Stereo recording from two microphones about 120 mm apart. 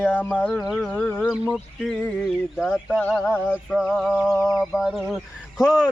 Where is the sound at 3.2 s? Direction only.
15° left (ahead or behind).